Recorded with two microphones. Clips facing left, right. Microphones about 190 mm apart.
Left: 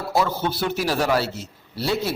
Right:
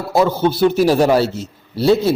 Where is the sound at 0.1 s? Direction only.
20° right (ahead or behind).